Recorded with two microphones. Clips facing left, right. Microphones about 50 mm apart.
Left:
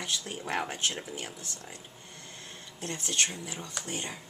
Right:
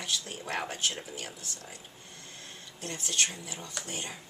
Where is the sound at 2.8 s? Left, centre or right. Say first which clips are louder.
Left 1 dB; left.